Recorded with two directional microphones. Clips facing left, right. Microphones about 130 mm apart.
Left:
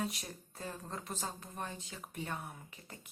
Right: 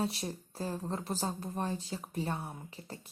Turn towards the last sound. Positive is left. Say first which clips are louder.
# right 7 dB
turn(degrees=-35)  # may be behind; listen again after turning